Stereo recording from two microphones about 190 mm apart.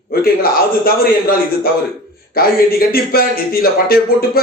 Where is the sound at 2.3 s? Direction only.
50° left (ahead or behind).